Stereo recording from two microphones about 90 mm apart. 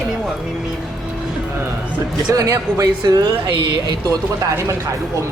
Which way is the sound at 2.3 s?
40° right (ahead or behind).